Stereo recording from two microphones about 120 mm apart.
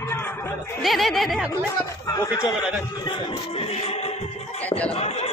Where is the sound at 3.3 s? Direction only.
55° left (ahead or behind).